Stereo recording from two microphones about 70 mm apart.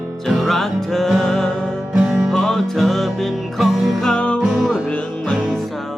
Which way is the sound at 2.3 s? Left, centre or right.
Centre.